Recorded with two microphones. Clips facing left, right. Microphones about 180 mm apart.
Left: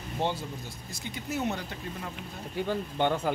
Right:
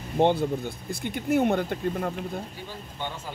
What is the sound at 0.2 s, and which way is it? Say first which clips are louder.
Speech: right 10 dB; 60° right (ahead or behind).